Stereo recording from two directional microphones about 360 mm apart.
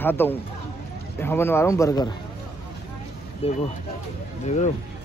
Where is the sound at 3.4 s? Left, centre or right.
Centre.